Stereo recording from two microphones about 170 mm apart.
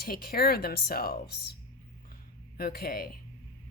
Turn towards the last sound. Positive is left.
turn(degrees=60)  # may be behind; listen again after turning